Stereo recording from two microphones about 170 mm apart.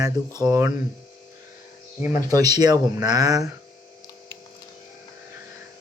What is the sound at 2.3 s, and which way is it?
Speech, 20° right (ahead or behind).